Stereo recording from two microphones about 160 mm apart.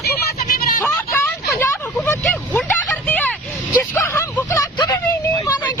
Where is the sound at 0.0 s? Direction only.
75° left (ahead or behind).